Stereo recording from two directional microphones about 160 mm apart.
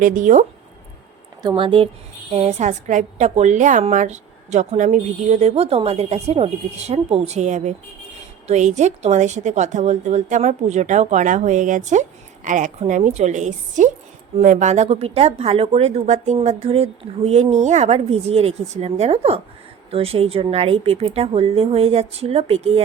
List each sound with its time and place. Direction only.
0.0 s speech: 55° right (ahead or behind)
1.4 s a woman's voice: 30° right (ahead or behind)